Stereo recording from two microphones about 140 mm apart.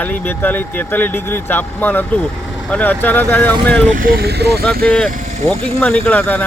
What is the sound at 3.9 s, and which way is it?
Speech, 90° right.